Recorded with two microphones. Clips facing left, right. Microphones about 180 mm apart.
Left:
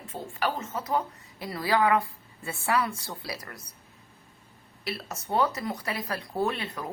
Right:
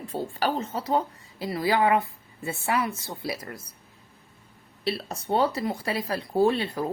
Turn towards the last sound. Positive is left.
turn(degrees=-30)  # may be behind; listen again after turning